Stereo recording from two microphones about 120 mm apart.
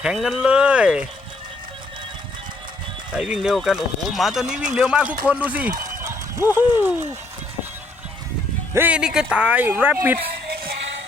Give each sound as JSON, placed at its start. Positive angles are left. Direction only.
{"t": 0.0, "sound": "speech", "side_deg": -5}
{"t": 3.2, "sound": "speech", "side_deg": -10}
{"t": 6.0, "sound": "a sound", "side_deg": -25}
{"t": 8.7, "sound": "speech", "side_deg": -15}